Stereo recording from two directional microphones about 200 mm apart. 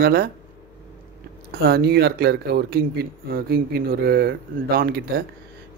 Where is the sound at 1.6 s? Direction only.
55° right (ahead or behind).